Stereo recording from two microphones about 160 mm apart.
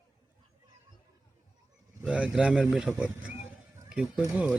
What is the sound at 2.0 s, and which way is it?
Speech, 5° right (ahead or behind).